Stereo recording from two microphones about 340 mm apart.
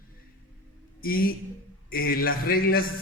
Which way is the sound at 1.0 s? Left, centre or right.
Left.